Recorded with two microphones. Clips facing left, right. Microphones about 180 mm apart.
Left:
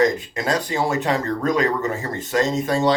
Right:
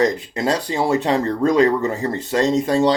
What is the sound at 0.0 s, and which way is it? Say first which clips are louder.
Speech: right 1 dB; 35° right (ahead or behind).